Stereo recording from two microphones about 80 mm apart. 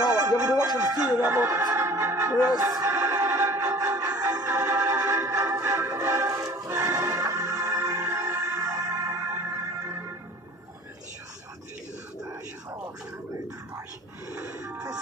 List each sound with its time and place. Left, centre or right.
0.4 s music: right
1.6 s organ: right
2.6 s music: right
6.3 s music: right
14.6 s radio: right